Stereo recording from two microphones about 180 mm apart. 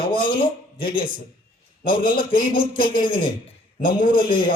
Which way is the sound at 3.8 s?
50° left (ahead or behind).